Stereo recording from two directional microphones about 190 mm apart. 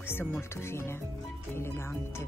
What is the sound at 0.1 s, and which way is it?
Speech, 10° left (ahead or behind).